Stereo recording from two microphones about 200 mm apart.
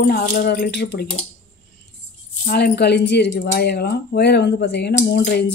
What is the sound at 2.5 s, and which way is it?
A woman's voice, 50° left (ahead or behind).